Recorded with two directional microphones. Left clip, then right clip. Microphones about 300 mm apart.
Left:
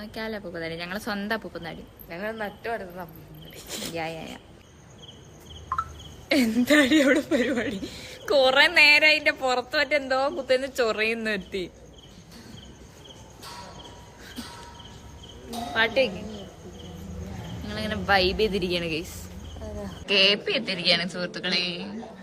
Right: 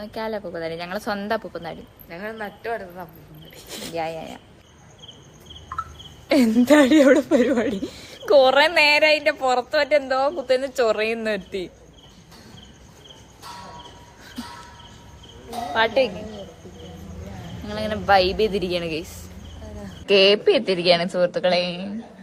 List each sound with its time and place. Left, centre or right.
0.0 s speech: centre
6.2 s speech: centre
15.7 s speech: centre
17.7 s a woman's voice: centre